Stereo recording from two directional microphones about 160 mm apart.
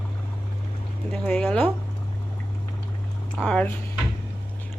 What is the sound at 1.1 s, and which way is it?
Speech, 5° left (ahead or behind).